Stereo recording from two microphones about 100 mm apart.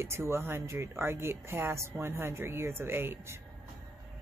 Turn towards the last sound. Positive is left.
turn(degrees=-25)  # may be behind; listen again after turning